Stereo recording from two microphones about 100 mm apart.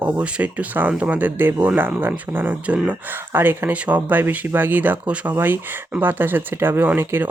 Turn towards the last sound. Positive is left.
turn(degrees=-20)  # may be behind; listen again after turning